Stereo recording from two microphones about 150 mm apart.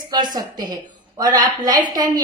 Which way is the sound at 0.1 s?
30° right (ahead or behind).